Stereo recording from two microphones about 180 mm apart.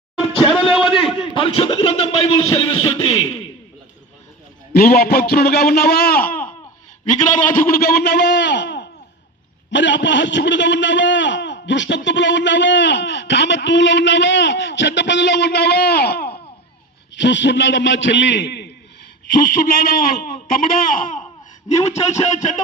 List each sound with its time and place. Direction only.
1.4 s speech: 30° left (ahead or behind)
4.7 s a man's voice: 60° left (ahead or behind)
7.7 s a man's voice: 60° left (ahead or behind)
17.2 s a man's voice: 80° left
19.4 s speech: 50° left (ahead or behind)